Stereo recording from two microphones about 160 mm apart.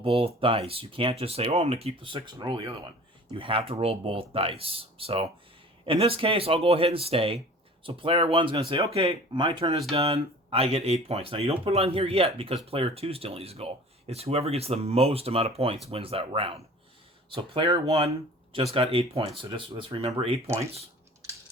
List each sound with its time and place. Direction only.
0.0 s speech: 35° right (ahead or behind)